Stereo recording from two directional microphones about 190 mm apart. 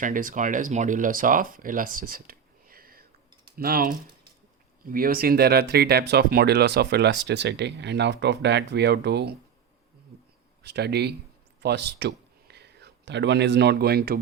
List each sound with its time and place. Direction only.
0.0 s speech: 45° right (ahead or behind); by 9.3 s 60° right (ahead or behind)
10.6 s speech: 60° right (ahead or behind)